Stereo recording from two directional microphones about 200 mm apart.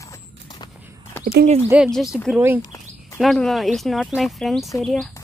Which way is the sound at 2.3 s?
10° right (ahead or behind).